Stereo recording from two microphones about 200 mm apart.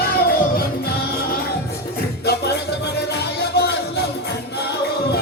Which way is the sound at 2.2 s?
55° left (ahead or behind).